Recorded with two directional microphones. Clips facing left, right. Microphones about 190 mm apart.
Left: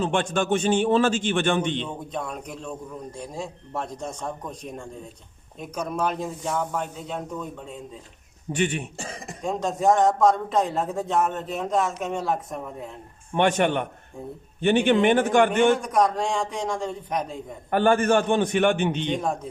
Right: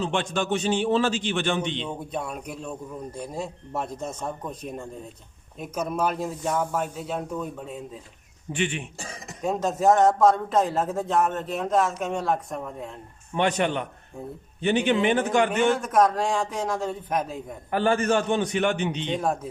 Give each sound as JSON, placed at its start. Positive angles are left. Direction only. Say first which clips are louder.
{"t": 0.0, "sound": "a man's voice", "louder": "left 2 dB", "side_deg": 50}
{"t": 2.1, "sound": "a man's voice", "louder": "left 1 dB", "side_deg": -5}
{"t": 8.5, "sound": "a man's voice", "louder": "left 3 dB", "side_deg": 45}
{"t": 9.4, "sound": "a man's voice", "louder": "right 1 dB", "side_deg": -5}
{"t": 13.3, "sound": "speech", "louder": "left 3 dB", "side_deg": 55}
{"t": 15.8, "sound": "a man's voice", "louder": "right 1 dB", "side_deg": 0}
{"t": 17.7, "sound": "a man's voice", "louder": "left 3 dB", "side_deg": 55}
{"t": 19.2, "sound": "a man's voice", "louder": "right 1 dB", "side_deg": -5}